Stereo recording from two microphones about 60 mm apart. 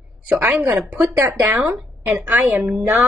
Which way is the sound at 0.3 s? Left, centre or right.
Right.